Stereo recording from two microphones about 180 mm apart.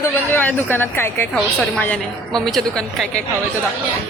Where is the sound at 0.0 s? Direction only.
10° left (ahead or behind).